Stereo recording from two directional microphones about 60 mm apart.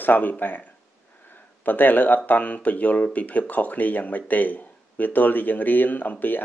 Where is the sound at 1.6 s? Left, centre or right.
Left.